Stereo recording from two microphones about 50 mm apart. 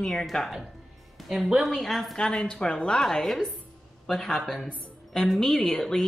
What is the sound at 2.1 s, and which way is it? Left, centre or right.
Speech, centre.